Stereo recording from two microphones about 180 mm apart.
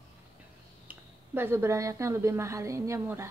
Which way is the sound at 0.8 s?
10° right (ahead or behind).